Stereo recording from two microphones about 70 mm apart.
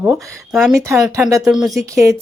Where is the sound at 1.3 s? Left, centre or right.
Right.